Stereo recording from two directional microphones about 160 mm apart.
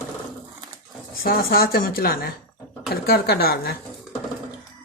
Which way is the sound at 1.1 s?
65° left (ahead or behind).